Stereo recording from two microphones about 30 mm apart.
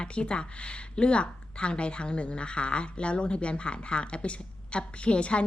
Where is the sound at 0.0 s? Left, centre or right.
Left.